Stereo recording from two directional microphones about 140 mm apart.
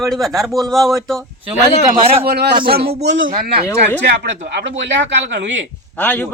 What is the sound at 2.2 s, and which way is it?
A man's voice, 90° right.